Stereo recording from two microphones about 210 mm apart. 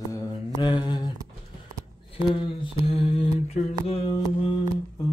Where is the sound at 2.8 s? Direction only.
25° left (ahead or behind).